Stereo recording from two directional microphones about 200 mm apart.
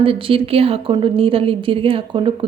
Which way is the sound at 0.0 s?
25° right (ahead or behind).